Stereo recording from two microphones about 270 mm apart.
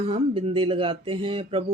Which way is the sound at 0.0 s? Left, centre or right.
Right.